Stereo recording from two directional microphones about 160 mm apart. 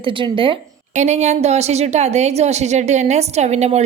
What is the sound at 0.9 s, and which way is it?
Speech, 45° right (ahead or behind).